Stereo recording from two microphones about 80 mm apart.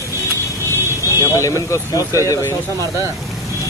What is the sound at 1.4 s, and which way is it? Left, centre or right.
Speech, left.